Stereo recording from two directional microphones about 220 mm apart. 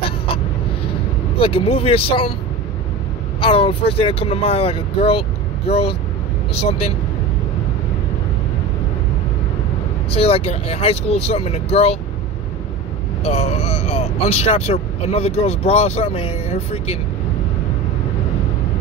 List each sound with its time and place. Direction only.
1.4 s speech: 25° left (ahead or behind)
3.3 s speech: 25° left (ahead or behind)
6.6 s speech: 25° left (ahead or behind)
10.1 s speech: 25° left (ahead or behind)
13.2 s speech: 25° left (ahead or behind)